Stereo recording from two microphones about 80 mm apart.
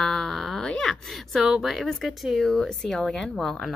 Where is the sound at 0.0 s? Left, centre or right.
Centre.